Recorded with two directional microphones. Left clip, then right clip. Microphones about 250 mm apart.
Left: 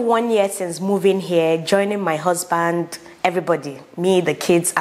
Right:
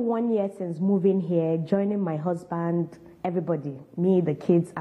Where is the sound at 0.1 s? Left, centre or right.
Centre.